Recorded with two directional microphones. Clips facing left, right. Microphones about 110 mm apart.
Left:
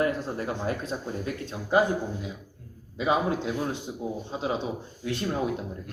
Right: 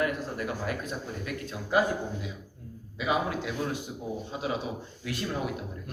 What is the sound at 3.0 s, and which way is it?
A man's voice, 30° left (ahead or behind).